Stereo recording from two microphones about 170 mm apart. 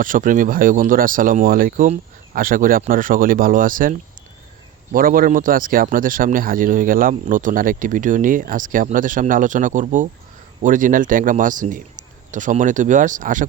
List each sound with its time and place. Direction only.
0.0 s speech: 50° right (ahead or behind)